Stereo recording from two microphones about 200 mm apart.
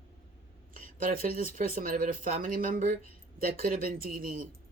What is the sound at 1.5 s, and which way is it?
Speech, 45° right (ahead or behind).